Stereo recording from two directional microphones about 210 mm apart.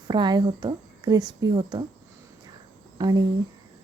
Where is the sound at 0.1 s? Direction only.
20° right (ahead or behind).